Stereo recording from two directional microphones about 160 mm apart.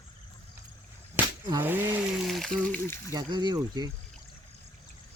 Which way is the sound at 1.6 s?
15° right (ahead or behind).